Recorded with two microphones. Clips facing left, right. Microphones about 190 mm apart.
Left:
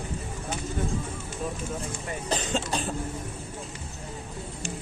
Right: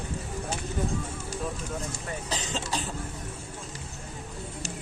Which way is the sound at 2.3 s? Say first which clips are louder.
Left 5 dB; 55° left (ahead or behind).